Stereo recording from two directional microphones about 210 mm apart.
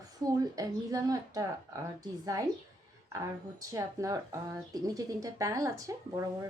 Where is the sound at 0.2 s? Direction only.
15° right (ahead or behind).